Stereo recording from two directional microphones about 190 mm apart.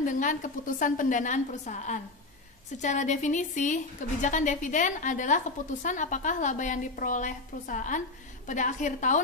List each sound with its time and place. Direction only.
0.0 s a woman's voice: 40° left (ahead or behind)